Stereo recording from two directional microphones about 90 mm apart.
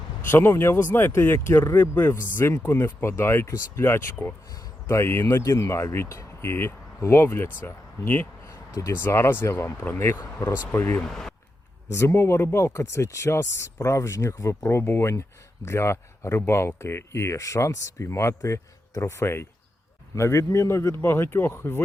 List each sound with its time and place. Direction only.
0.3 s speech: 25° left (ahead or behind)
11.0 s speech: 5° left (ahead or behind)
11.9 s speech: 30° left (ahead or behind)